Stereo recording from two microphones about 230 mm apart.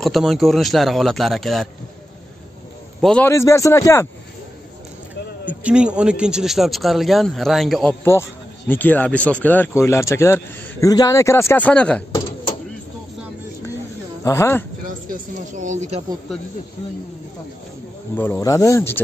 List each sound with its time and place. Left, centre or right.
0.0 s speech: centre
3.0 s speech: centre
5.4 s speech: centre
14.2 s speech: centre
15.0 s speech: right
18.1 s speech: centre